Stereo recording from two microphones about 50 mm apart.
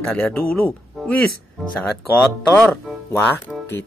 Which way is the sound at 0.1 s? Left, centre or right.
Left.